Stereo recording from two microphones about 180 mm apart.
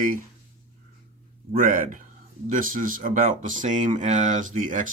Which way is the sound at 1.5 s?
50° right (ahead or behind).